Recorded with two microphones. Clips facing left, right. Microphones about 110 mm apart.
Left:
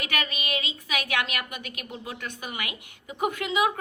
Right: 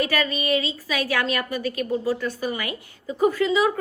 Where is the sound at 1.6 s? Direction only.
35° right (ahead or behind).